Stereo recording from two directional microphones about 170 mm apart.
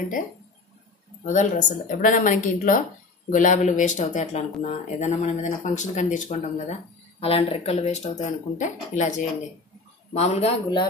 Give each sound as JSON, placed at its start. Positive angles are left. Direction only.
{"t": 1.2, "sound": "speech", "side_deg": 45}
{"t": 6.6, "sound": "speech", "side_deg": 35}